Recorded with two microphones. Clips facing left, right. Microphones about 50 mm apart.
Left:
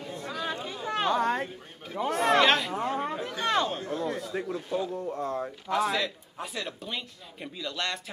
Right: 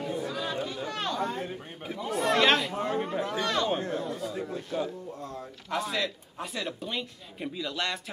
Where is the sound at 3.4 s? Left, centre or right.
Left.